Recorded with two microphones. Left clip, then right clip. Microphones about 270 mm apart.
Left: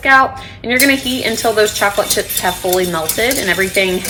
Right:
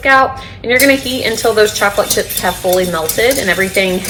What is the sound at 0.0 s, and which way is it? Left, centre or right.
A woman's voice, left.